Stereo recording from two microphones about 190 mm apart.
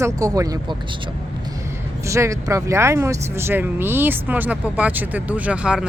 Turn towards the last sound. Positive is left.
turn(degrees=-5)  # may be behind; listen again after turning